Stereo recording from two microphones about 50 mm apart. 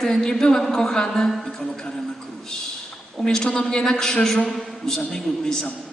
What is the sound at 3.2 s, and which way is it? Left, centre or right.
A woman's voice, centre.